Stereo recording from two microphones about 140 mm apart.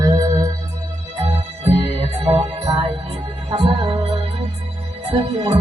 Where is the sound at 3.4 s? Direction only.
35° right (ahead or behind).